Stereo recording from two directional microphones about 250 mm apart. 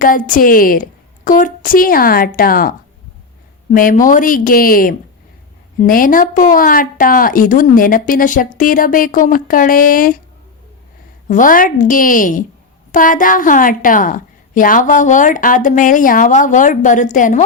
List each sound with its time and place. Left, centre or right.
0.0 s a woman's voice: left
3.8 s a woman's voice: left
11.3 s a woman's voice: left